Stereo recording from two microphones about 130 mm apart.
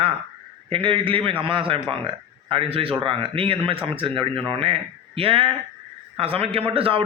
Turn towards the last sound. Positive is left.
turn(degrees=-45)  # may be behind; listen again after turning